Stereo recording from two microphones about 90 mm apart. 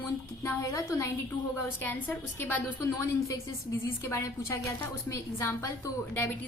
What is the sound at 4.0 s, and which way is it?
A woman's voice, 30° left (ahead or behind).